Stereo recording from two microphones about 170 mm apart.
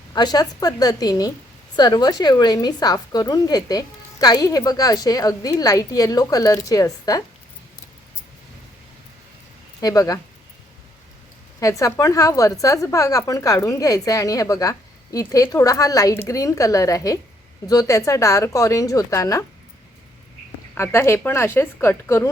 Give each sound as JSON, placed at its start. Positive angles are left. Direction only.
{"t": 0.1, "sound": "a woman's voice", "side_deg": 25}
{"t": 9.8, "sound": "a woman's voice", "side_deg": 20}
{"t": 11.8, "sound": "a woman's voice", "side_deg": 20}
{"t": 20.7, "sound": "a woman's voice", "side_deg": 15}